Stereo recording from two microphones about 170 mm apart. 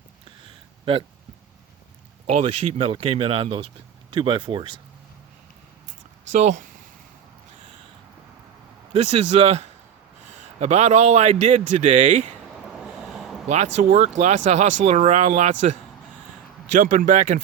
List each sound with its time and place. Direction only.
2.2 s speech: 40° right (ahead or behind)
6.3 s speech: 45° right (ahead or behind)
8.9 s speech: 35° right (ahead or behind)
12.8 s a sound: centre (ahead or behind)
13.5 s speech: 40° right (ahead or behind)